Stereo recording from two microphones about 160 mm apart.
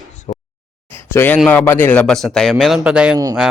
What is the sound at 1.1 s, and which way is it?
Speech, 15° left (ahead or behind).